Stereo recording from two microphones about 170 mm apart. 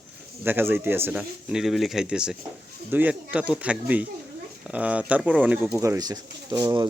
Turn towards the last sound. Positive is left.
turn(degrees=-25)  # may be behind; listen again after turning